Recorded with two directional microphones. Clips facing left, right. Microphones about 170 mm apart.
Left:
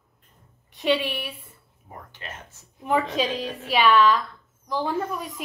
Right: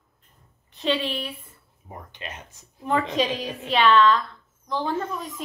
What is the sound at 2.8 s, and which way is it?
A woman's voice, 10° left (ahead or behind).